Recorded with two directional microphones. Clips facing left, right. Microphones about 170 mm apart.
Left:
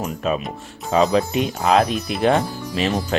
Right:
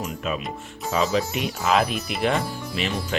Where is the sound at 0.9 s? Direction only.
40° left (ahead or behind).